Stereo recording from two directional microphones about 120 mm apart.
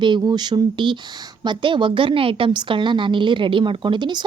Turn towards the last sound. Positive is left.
turn(degrees=-40)  # may be behind; listen again after turning